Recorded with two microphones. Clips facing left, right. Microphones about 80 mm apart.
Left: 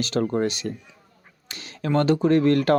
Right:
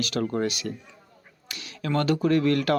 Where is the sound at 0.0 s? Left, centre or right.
Left.